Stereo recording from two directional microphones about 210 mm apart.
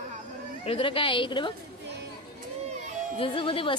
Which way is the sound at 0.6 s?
25° left (ahead or behind).